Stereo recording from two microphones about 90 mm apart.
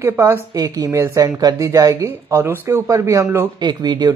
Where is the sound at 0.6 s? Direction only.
40° right (ahead or behind).